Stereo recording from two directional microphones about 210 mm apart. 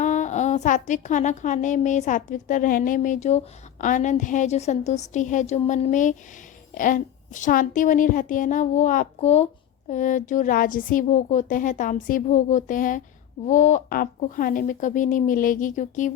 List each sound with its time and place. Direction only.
0.0 s a woman's voice: 35° left (ahead or behind)